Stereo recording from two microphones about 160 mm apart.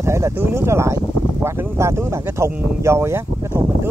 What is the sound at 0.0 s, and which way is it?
Speech, 15° right (ahead or behind).